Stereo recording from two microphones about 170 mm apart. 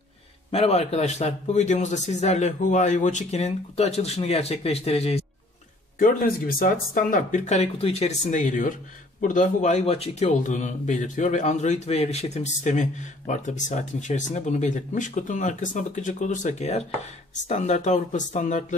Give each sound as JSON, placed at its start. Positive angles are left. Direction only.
{"t": 0.5, "sound": "a man's voice", "side_deg": 40}
{"t": 5.9, "sound": "a man's voice", "side_deg": 55}